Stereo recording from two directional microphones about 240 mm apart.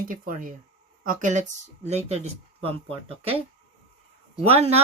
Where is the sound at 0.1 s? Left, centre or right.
Right.